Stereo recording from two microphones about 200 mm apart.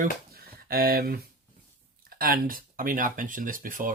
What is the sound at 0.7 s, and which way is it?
Speech, 50° right (ahead or behind).